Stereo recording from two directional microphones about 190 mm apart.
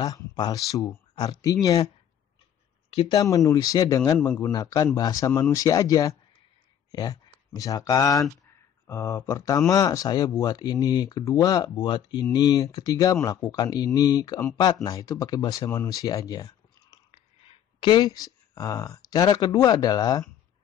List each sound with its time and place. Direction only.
0.0 s speech: 20° left (ahead or behind)
3.1 s speech: 15° left (ahead or behind)